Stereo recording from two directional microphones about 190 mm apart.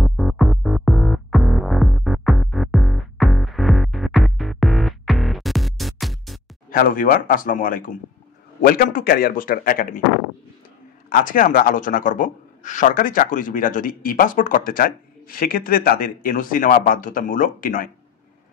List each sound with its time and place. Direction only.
0.0 s music: centre (ahead or behind)
6.7 s a man's voice: 45° left (ahead or behind)
11.1 s a man's voice: 45° left (ahead or behind)